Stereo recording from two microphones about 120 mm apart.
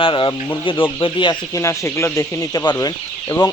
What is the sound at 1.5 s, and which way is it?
Speech, 25° left (ahead or behind).